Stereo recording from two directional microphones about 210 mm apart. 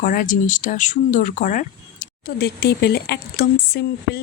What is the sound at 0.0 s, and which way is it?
Speech, 40° left (ahead or behind).